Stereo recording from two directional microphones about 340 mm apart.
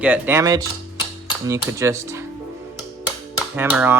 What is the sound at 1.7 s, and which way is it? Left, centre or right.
Speech, centre.